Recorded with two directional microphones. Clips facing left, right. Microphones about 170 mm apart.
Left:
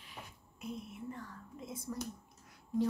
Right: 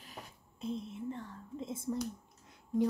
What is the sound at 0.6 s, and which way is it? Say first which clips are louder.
Speech: right 5 dB; 25° right (ahead or behind).